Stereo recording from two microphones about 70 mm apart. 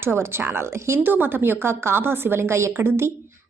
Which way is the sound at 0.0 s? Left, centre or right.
Right.